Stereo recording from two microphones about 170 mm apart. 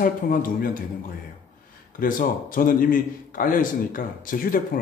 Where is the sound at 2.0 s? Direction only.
55° left (ahead or behind).